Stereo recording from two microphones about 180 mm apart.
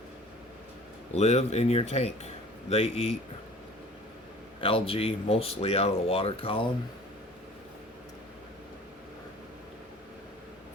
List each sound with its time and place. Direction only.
1.1 s speech: 35° left (ahead or behind)
4.6 s speech: 30° left (ahead or behind)